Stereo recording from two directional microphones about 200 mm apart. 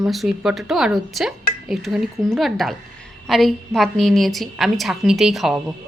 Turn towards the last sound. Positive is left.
turn(degrees=0)  # may be behind; listen again after turning